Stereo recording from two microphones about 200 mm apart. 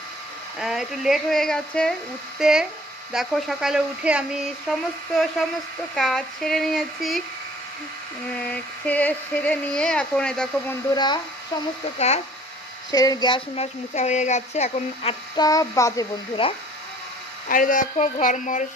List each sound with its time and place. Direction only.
0.6 s speech: centre (ahead or behind)
8.4 s speech: 5° left (ahead or behind)
10.9 s speech: 20° left (ahead or behind)
11.9 s speech: 35° left (ahead or behind)
12.9 s speech: 20° left (ahead or behind); by 15.1 s 35° left (ahead or behind)
15.4 s speech: 15° left (ahead or behind)
17.5 s speech: 40° left (ahead or behind)